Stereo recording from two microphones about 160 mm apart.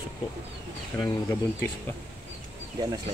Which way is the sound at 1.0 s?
15° left (ahead or behind).